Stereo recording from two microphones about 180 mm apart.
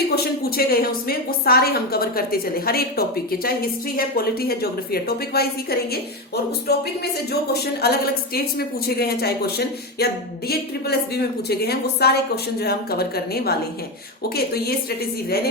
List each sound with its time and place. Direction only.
0.1 s a woman's voice: 60° left (ahead or behind)